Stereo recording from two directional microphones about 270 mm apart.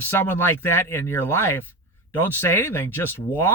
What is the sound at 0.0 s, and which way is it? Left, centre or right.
Speech, centre.